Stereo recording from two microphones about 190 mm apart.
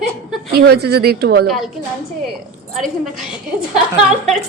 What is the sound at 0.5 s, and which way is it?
Speech, 55° right (ahead or behind).